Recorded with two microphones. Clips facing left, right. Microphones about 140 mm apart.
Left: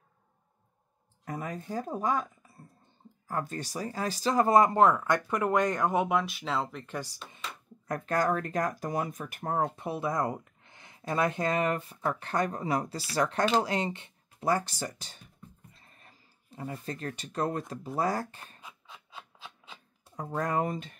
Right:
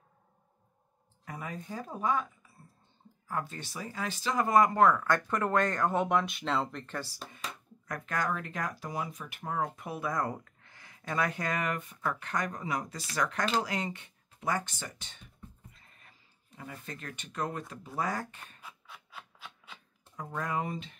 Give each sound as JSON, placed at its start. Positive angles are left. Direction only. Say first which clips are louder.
{"t": 1.2, "sound": "speech", "louder": "left 4 dB", "side_deg": 40}
{"t": 3.3, "sound": "speech", "louder": "left 3 dB", "side_deg": 40}
{"t": 7.2, "sound": "speech", "louder": "even", "side_deg": 25}
{"t": 9.6, "sound": "speech", "louder": "left 3 dB", "side_deg": 25}
{"t": 15.7, "sound": "a sound", "louder": "left 3 dB", "side_deg": 35}
{"t": 16.8, "sound": "speech", "louder": "left 7 dB", "side_deg": 35}
{"t": 18.6, "sound": "rub", "louder": "left 1 dB", "side_deg": 20}
{"t": 20.2, "sound": "speech", "louder": "left 5 dB", "side_deg": 40}